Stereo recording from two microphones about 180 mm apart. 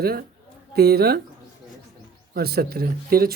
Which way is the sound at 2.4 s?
60° right (ahead or behind).